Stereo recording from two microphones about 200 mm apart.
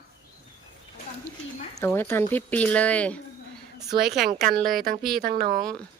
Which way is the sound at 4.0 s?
55° right (ahead or behind).